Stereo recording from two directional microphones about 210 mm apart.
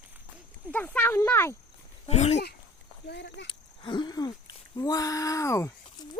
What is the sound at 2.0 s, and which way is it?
Speech, 30° left (ahead or behind).